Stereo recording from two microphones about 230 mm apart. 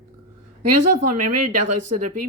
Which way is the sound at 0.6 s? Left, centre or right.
Right.